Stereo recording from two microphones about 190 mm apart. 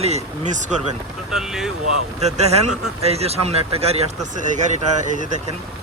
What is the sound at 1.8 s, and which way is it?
Speech, 35° right (ahead or behind).